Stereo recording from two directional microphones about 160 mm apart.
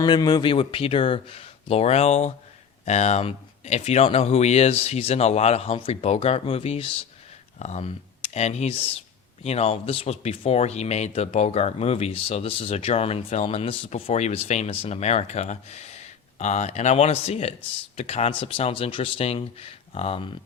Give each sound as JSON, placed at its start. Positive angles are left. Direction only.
{"t": 0.0, "sound": "speech", "side_deg": 25}